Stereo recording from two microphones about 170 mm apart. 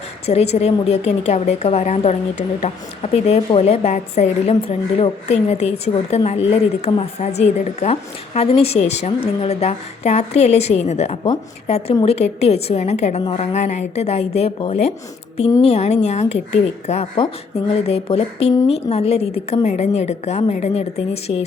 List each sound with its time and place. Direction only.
0.3 s speech: 40° left (ahead or behind)